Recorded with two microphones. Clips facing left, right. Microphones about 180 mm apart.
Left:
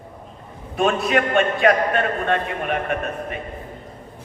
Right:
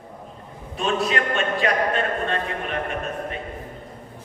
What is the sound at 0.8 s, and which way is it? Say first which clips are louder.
A man's voice: left 4 dB; 60° left (ahead or behind).